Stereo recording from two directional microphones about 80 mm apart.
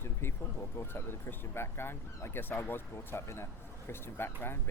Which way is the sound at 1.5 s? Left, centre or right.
Left.